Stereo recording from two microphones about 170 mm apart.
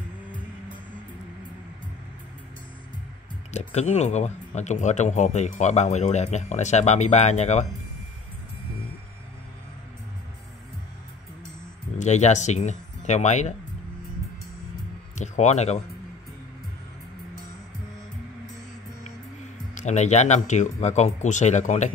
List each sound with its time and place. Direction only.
3.5 s speech: 40° left (ahead or behind)
12.0 s speech: 45° left (ahead or behind)
15.1 s speech: 45° left (ahead or behind)
19.7 s speech: 45° left (ahead or behind)